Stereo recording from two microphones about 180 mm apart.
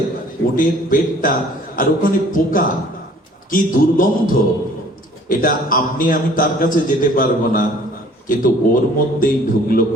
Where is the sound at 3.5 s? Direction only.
50° left (ahead or behind).